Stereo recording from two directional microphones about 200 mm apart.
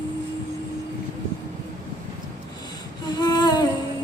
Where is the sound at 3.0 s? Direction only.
20° left (ahead or behind).